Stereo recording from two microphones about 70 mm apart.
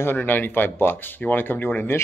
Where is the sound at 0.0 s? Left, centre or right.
Left.